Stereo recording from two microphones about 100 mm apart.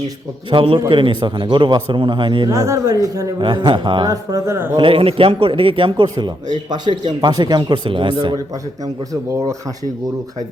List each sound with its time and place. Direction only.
0.5 s a man's voice: 65° right (ahead or behind)
0.9 s a man's voice: 55° right (ahead or behind)
2.5 s speech: 35° right (ahead or behind)
3.3 s a man's voice: 50° right (ahead or behind)
4.1 s speech: 35° right (ahead or behind)
4.8 s a man's voice: 65° right (ahead or behind)
9.3 s speech: 35° right (ahead or behind)